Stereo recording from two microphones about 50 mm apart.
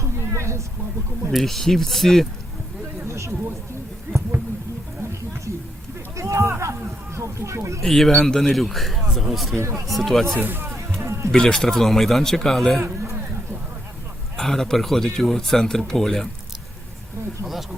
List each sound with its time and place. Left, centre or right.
0.0 s a sound: right
1.3 s a man's voice: centre
3.1 s a sound: right
5.5 s a sound: right
6.1 s a sound: right
7.2 s speech: right
7.8 s a man's voice: centre
9.6 s speech: right
9.9 s a man's voice: centre
10.4 s speech: right
11.0 s music: right
11.3 s speech: centre
14.3 s speech: centre
17.4 s speech: centre